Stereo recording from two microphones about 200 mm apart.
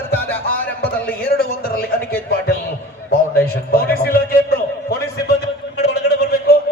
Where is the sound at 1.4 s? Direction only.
50° left (ahead or behind).